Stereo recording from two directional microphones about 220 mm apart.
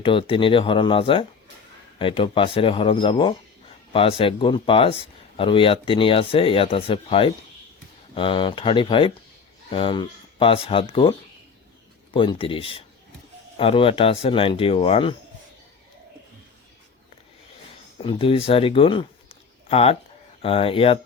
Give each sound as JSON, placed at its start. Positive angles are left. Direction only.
{"t": 0.0, "sound": "speech", "side_deg": 25}
{"t": 12.1, "sound": "speech", "side_deg": 25}
{"t": 17.9, "sound": "speech", "side_deg": 25}